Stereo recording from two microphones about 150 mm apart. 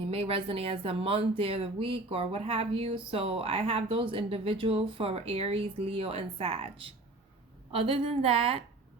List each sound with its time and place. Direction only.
0.1 s speech: 40° right (ahead or behind)